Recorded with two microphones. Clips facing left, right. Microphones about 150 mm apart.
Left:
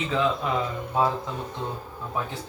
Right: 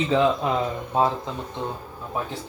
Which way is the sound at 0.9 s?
25° right (ahead or behind).